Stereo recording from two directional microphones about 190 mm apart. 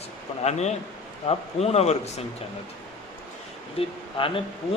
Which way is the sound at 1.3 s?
35° left (ahead or behind).